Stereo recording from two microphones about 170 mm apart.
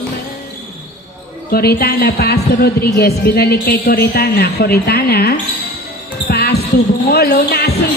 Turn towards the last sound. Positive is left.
turn(degrees=65)  # may be behind; listen again after turning